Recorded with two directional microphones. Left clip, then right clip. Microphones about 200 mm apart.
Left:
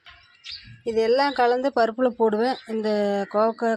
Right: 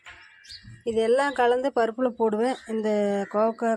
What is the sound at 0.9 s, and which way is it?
Speech, centre (ahead or behind).